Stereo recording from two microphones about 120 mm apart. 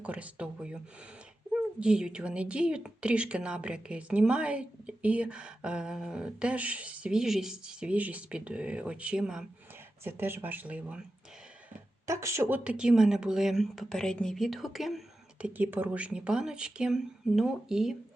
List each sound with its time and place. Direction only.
0.0 s speech: 10° right (ahead or behind)
1.8 s speech: 5° right (ahead or behind)
10.0 s speech: 20° right (ahead or behind)
12.0 s speech: 25° right (ahead or behind); by 17.9 s 5° right (ahead or behind)